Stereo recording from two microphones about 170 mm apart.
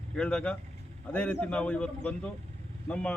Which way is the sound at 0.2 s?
5° left (ahead or behind).